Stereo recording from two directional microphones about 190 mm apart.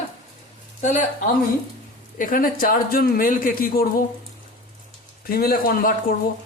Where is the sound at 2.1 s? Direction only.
45° left (ahead or behind).